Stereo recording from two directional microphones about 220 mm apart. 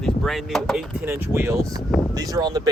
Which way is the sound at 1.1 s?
10° right (ahead or behind).